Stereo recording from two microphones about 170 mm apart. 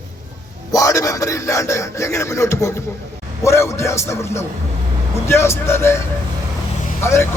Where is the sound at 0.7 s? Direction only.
20° left (ahead or behind).